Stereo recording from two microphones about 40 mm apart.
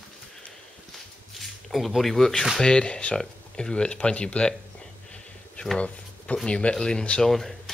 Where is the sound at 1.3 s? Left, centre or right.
Centre.